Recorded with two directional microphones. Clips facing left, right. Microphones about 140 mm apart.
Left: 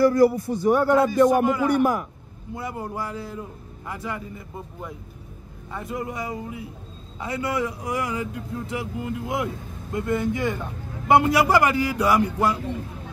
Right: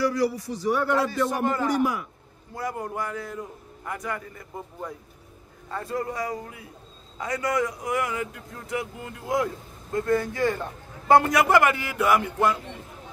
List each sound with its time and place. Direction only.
0.0 s a man's voice: 50° left (ahead or behind)
1.4 s music: 10° left (ahead or behind)
2.5 s speech: 20° left (ahead or behind)
5.8 s speech: 20° left (ahead or behind)
12.0 s music: 20° left (ahead or behind)